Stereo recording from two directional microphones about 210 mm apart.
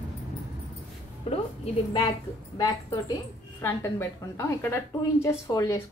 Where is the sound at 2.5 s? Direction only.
15° left (ahead or behind).